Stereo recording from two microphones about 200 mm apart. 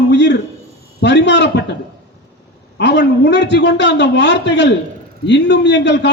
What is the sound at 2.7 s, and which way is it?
A man's voice, 60° left (ahead or behind).